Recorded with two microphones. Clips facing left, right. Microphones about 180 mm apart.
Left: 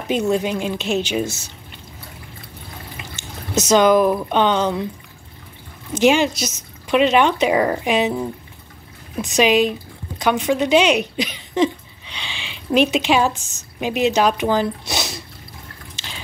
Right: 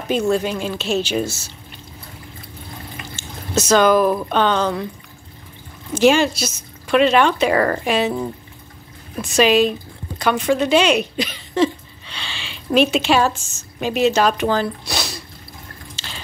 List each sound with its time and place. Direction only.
0.1 s a woman's voice: 15° left (ahead or behind)
3.2 s a sound: 20° left (ahead or behind)
4.3 s a woman's voice: 15° left (ahead or behind)
5.9 s a woman's voice: 20° left (ahead or behind)
9.2 s a woman's voice: 15° left (ahead or behind)